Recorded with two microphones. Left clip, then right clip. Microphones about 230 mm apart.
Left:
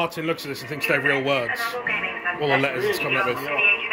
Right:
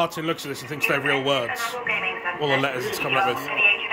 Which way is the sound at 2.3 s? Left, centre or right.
Centre.